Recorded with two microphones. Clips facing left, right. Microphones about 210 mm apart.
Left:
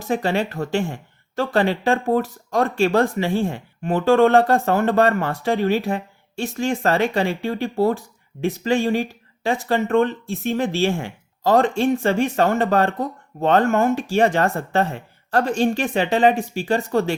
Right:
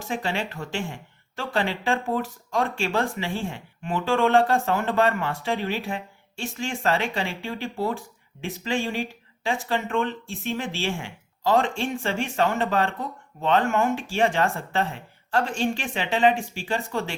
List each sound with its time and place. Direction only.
0.1 s speech: 40° left (ahead or behind)